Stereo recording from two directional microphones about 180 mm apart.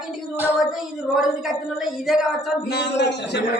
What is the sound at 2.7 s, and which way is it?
Speech, 70° left (ahead or behind).